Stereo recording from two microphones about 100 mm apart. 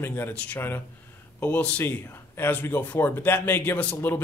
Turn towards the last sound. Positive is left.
turn(degrees=20)  # may be behind; listen again after turning